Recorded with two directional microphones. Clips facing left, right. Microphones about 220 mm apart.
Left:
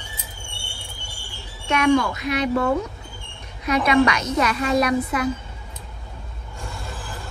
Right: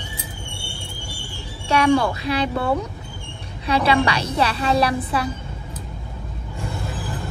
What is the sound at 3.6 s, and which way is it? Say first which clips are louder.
A woman's voice: left 1 dB; 30° right (ahead or behind).